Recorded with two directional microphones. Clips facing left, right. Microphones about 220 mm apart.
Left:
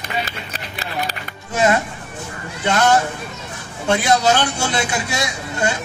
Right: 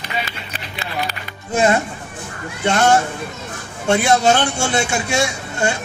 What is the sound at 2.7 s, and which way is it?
Speech, 25° right (ahead or behind).